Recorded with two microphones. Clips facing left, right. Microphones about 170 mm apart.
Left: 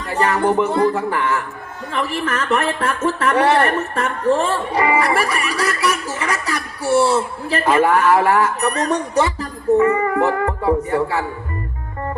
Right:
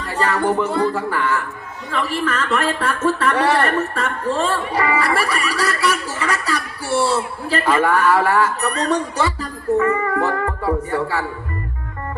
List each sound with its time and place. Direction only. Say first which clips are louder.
0.0 s a man's voice: left 2 dB; 25° left (ahead or behind)
10.2 s music: left 3 dB; 20° left (ahead or behind)